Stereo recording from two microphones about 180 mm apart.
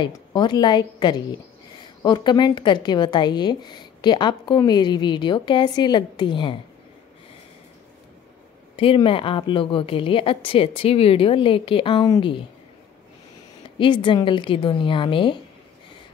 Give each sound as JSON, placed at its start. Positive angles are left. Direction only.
{"t": 0.0, "sound": "a woman's voice", "side_deg": 25}
{"t": 8.7, "sound": "a woman's voice", "side_deg": 30}
{"t": 13.7, "sound": "a woman's voice", "side_deg": 25}